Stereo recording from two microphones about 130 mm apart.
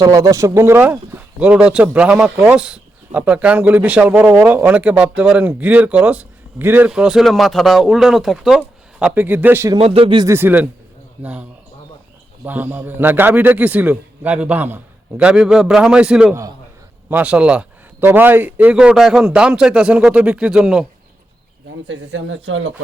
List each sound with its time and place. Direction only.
0.0 s speech: 25° right (ahead or behind)
9.7 s speech: 50° right (ahead or behind)
10.2 s speech: 15° right (ahead or behind)
12.5 s speech: 15° right (ahead or behind)